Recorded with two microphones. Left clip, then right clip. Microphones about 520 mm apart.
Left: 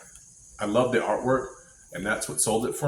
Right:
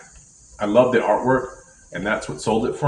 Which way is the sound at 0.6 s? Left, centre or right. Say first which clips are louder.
Right 7 dB; left.